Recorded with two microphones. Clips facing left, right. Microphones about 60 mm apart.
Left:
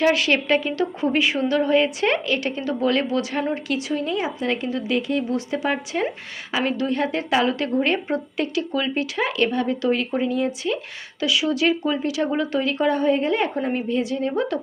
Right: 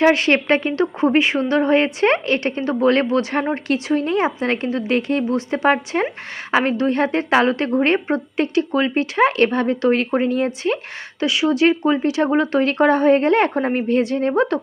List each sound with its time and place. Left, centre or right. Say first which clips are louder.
0.0 s a woman's voice: right 4 dB; right